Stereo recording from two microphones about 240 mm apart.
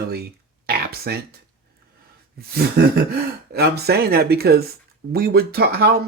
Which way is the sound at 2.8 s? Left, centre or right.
Right.